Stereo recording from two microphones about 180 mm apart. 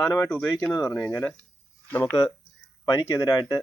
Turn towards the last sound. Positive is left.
turn(degrees=15)  # may be behind; listen again after turning